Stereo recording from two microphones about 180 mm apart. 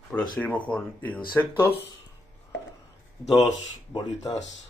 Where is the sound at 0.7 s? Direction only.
10° left (ahead or behind).